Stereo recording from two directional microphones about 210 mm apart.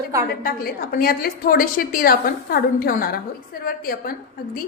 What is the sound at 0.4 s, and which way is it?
A woman's voice, 45° left (ahead or behind).